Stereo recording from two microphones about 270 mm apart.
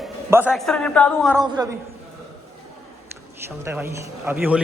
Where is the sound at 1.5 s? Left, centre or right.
Centre.